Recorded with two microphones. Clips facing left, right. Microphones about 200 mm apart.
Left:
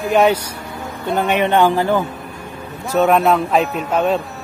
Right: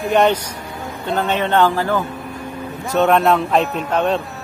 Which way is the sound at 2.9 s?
Centre (ahead or behind).